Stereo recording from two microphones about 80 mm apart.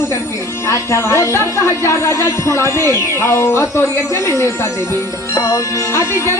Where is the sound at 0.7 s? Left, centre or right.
Left.